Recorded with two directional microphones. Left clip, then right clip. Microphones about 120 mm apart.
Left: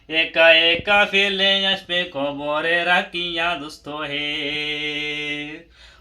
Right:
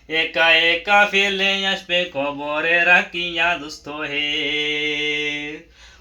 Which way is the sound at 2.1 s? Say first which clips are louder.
Even; 5° left (ahead or behind).